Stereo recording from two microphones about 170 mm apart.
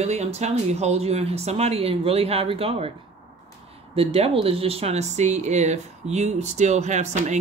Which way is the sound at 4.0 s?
35° right (ahead or behind).